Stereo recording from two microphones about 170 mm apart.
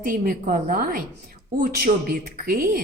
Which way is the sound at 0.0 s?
55° right (ahead or behind).